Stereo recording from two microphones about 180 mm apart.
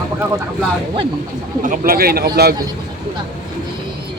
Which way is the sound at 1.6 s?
50° right (ahead or behind).